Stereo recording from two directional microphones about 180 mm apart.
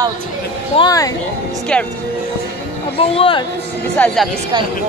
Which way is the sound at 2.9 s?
30° left (ahead or behind).